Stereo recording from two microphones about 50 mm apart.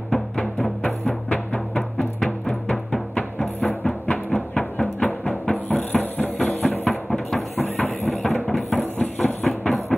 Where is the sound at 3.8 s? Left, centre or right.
Centre.